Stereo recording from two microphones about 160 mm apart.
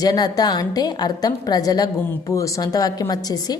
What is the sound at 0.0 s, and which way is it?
A woman's voice, 25° left (ahead or behind).